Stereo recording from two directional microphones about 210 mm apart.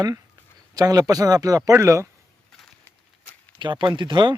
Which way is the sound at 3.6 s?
20° right (ahead or behind).